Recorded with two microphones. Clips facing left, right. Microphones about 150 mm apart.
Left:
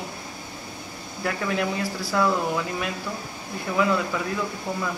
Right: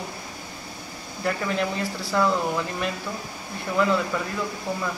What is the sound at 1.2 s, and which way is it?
Speech, 5° left (ahead or behind).